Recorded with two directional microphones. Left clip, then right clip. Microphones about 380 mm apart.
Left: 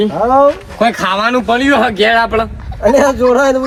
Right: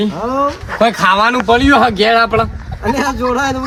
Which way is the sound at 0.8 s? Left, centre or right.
Centre.